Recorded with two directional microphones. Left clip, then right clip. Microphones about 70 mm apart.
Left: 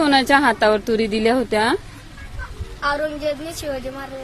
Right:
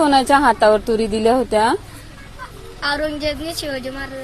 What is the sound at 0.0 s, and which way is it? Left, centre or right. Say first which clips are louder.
A woman's voice: right 2 dB; left.